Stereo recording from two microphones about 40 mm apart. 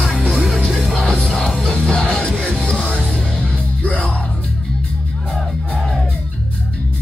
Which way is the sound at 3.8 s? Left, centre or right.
Left.